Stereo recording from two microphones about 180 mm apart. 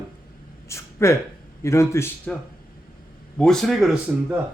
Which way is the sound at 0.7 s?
15° left (ahead or behind).